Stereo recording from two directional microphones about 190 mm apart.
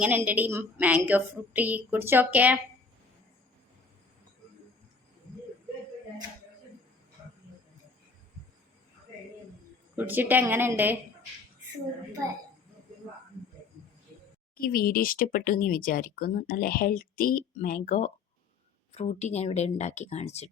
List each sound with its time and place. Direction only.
0.0 s a woman's voice: 10° right (ahead or behind)
10.0 s a woman's voice: 10° right (ahead or behind)
14.5 s speech: 50° left (ahead or behind); by 20.5 s 35° left (ahead or behind)